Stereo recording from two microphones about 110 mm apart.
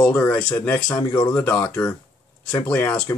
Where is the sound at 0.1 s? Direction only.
15° left (ahead or behind).